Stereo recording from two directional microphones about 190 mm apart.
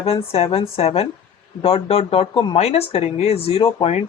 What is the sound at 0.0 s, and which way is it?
Speech, 30° left (ahead or behind).